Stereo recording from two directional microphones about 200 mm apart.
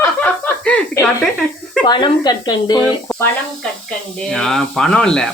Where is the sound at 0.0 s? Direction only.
5° left (ahead or behind).